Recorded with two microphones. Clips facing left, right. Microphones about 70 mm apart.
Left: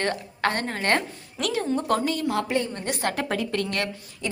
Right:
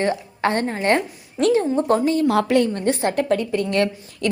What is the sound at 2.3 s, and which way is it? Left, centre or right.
Speech, right.